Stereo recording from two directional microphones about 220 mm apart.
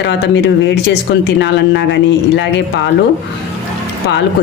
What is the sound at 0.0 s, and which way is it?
Speech, 50° left (ahead or behind).